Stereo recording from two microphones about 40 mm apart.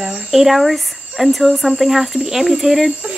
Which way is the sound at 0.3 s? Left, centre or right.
Centre.